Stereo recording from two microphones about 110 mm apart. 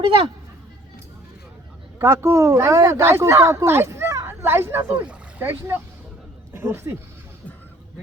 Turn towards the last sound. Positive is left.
turn(degrees=-20)  # may be behind; listen again after turning